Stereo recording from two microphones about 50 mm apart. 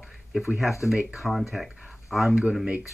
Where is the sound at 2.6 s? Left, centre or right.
Right.